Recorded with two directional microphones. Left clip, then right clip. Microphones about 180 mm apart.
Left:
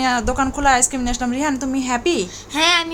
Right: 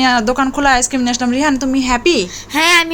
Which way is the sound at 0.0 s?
20° right (ahead or behind).